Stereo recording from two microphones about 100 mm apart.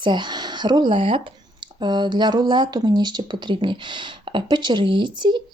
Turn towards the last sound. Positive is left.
turn(degrees=-50)  # may be behind; listen again after turning